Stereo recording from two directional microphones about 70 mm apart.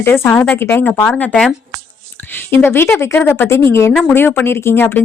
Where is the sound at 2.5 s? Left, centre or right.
Left.